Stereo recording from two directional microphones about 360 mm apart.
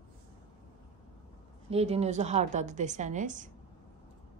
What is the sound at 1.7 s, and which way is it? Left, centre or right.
A woman's voice, centre.